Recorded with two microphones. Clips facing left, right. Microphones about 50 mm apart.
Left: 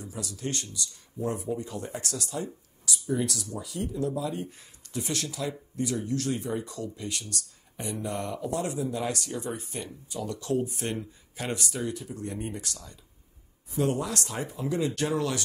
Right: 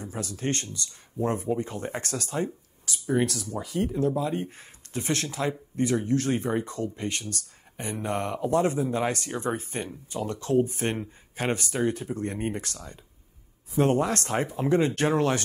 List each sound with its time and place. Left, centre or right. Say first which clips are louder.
0.0 s speech: right 4 dB; right